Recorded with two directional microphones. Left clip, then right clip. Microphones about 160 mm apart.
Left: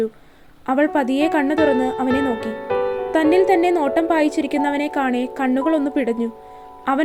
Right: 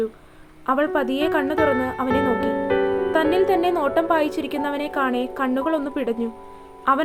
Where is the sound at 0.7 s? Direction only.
15° left (ahead or behind).